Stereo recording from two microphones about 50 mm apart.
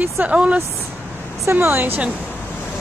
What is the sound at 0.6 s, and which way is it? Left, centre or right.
Speech, right.